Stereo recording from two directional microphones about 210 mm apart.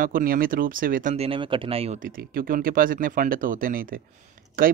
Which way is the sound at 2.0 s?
45° right (ahead or behind).